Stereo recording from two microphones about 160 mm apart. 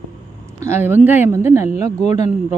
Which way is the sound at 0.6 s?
15° right (ahead or behind).